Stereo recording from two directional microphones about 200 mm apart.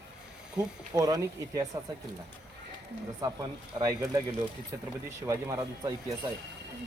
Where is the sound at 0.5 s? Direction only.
15° right (ahead or behind).